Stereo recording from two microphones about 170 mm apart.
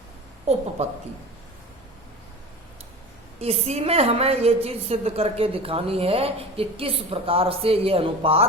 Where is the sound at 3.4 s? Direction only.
35° right (ahead or behind).